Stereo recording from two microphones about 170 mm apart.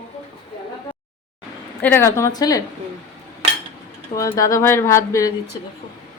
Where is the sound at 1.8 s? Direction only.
15° left (ahead or behind).